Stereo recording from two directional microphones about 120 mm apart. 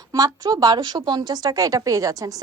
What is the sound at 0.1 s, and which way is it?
A woman's voice, 30° right (ahead or behind).